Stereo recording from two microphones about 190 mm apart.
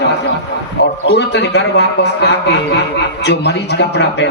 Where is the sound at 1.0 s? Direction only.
65° left (ahead or behind).